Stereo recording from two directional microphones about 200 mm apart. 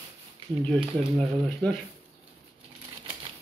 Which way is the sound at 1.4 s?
5° left (ahead or behind).